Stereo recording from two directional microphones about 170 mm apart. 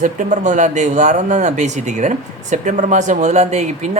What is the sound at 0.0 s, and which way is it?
Speech, 50° right (ahead or behind).